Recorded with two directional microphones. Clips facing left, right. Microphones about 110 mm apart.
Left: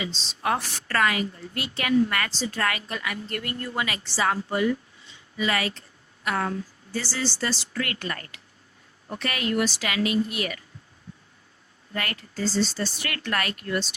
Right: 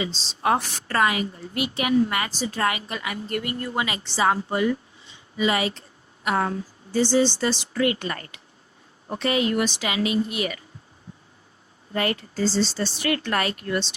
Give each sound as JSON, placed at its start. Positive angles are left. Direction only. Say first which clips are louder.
{"t": 0.0, "sound": "a woman's voice", "louder": "right 4 dB", "side_deg": -30}
{"t": 11.9, "sound": "a woman's voice", "louder": "right 6 dB", "side_deg": -25}